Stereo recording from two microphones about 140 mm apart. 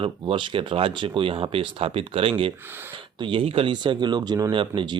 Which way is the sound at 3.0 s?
35° right (ahead or behind).